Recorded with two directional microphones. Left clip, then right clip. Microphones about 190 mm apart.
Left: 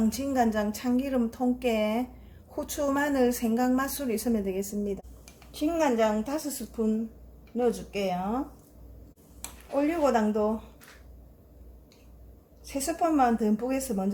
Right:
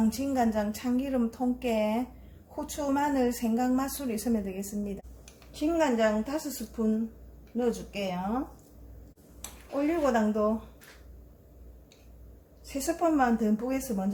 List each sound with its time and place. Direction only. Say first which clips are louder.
0.1 s a woman's voice: left 2 dB; 30° left (ahead or behind)
9.8 s a woman's voice: left 1 dB; 25° left (ahead or behind)
12.6 s a woman's voice: even; 25° left (ahead or behind)